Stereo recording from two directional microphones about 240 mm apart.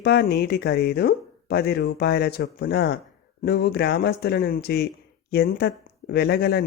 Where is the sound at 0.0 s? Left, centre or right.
Left.